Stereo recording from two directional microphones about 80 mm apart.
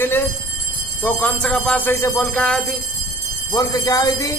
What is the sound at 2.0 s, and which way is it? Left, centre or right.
Speech, left.